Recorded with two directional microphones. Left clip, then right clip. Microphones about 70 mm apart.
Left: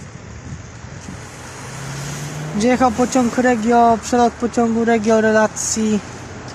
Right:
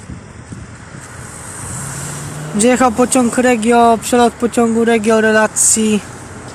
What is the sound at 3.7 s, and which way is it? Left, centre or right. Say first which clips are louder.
Speech: right 3 dB; centre.